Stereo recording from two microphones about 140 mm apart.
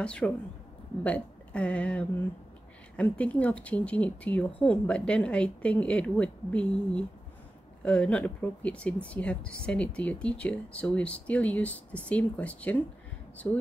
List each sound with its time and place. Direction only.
0.0 s speech: 5° left (ahead or behind)